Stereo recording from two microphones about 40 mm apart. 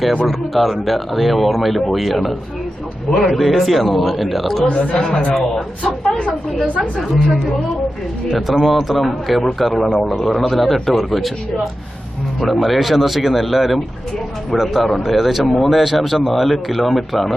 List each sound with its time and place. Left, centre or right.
0.3 s speech: centre
4.7 s speech: left
5.1 s a man's voice: centre
8.4 s speech: centre
12.4 s speech: centre